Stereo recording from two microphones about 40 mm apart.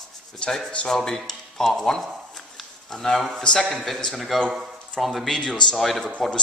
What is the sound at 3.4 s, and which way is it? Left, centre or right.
Speech, centre.